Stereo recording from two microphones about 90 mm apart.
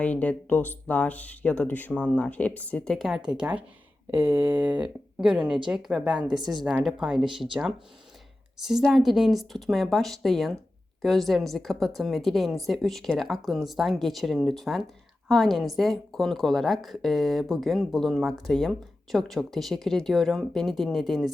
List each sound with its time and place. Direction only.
0.0 s speech: 15° left (ahead or behind)
3.2 s a woman's voice: 15° right (ahead or behind)
8.6 s a woman's voice: 5° right (ahead or behind)